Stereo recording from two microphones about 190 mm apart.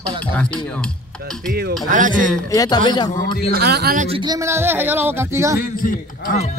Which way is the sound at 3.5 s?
55° right (ahead or behind).